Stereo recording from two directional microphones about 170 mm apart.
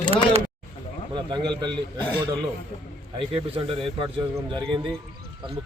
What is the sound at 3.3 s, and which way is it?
A man's voice, 35° right (ahead or behind).